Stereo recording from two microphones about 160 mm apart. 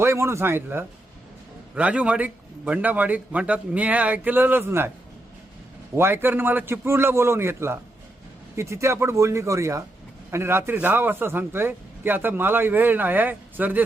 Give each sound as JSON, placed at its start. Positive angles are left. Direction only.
{"t": 0.0, "sound": "a man's voice", "side_deg": -15}
{"t": 6.0, "sound": "a man's voice", "side_deg": -15}